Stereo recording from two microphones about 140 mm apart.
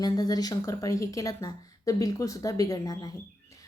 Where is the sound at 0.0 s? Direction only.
25° left (ahead or behind).